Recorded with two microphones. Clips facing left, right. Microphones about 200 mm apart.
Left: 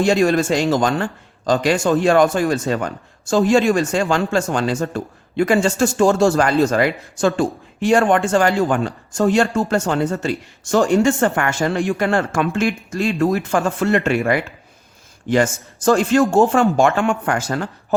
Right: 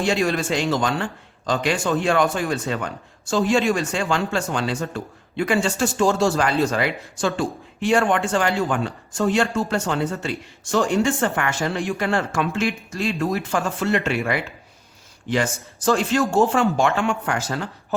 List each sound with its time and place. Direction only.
0.0 s speech: 45° left (ahead or behind)